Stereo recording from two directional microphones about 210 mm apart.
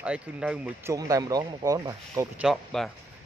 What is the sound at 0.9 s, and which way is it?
Speech, 15° right (ahead or behind).